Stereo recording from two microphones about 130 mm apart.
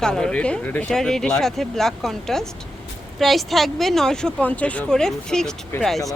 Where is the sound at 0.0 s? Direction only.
5° left (ahead or behind).